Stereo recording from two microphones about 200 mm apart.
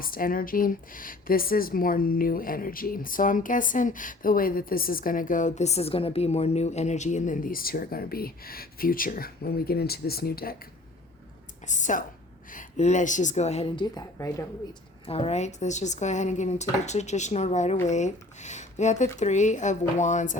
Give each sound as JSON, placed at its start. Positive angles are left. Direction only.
{"t": 0.0, "sound": "speech", "side_deg": 45}
{"t": 11.6, "sound": "a woman's voice", "side_deg": 35}
{"t": 15.0, "sound": "speech", "side_deg": 30}